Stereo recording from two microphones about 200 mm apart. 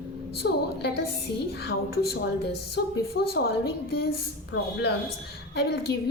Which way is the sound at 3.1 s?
50° left (ahead or behind).